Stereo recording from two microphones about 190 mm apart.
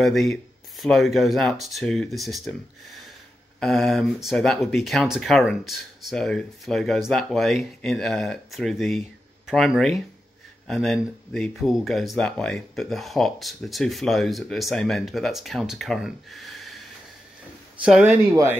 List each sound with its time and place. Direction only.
0.0 s speech: centre (ahead or behind)
17.8 s speech: 5° right (ahead or behind)
18.3 s speech: 15° right (ahead or behind)